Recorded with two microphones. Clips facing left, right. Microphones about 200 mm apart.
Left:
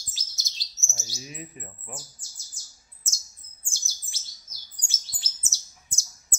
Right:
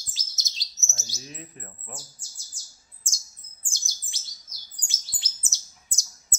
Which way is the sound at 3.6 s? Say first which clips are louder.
Right 1 dB; 15° right (ahead or behind).